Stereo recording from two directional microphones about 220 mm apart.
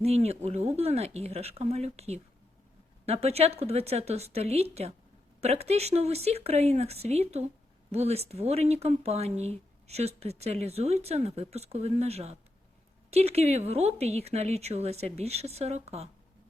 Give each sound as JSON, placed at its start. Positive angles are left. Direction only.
{"t": 0.0, "sound": "speech", "side_deg": -30}